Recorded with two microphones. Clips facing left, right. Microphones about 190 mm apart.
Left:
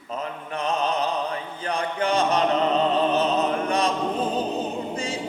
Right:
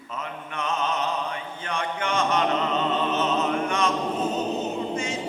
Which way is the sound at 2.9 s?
35° left (ahead or behind).